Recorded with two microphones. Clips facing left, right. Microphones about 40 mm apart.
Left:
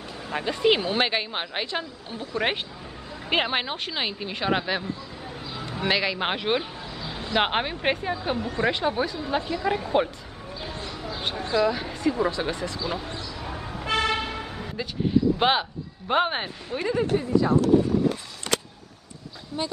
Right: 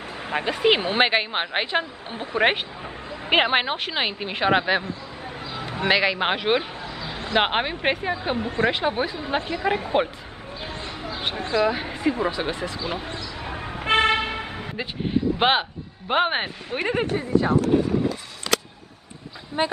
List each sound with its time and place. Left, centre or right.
0.3 s speech: right
8.3 s speech: right
13.5 s vehicle: right
15.3 s speech: right
16.8 s speech: right
19.5 s speech: right